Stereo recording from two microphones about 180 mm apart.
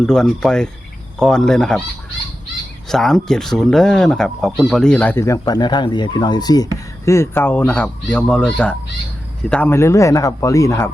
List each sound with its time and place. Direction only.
0.0 s speech: 5° left (ahead or behind)
2.9 s speech: centre (ahead or behind)